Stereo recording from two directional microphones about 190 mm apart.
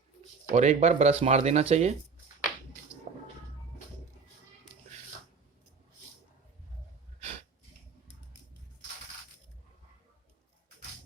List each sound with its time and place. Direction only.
0.5 s speech: 35° right (ahead or behind)
3.1 s music: 40° right (ahead or behind)